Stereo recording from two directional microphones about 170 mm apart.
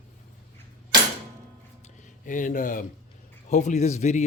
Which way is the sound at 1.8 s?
50° left (ahead or behind).